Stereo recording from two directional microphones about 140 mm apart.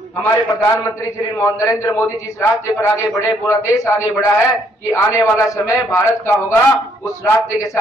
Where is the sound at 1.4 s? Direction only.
20° left (ahead or behind).